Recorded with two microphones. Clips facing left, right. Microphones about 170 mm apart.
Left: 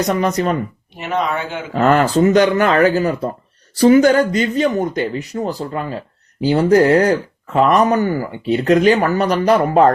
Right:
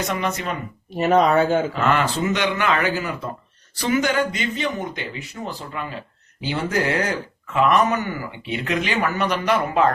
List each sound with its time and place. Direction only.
0.0 s speech: 40° left (ahead or behind)
0.9 s speech: 40° right (ahead or behind)
1.7 s speech: 40° left (ahead or behind)